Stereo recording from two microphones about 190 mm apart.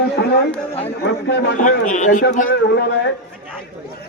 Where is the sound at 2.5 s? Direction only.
60° left (ahead or behind).